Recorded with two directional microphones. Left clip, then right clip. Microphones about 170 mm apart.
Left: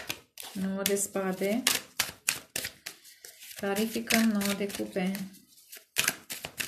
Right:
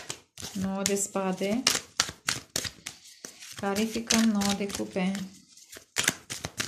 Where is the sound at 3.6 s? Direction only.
20° right (ahead or behind).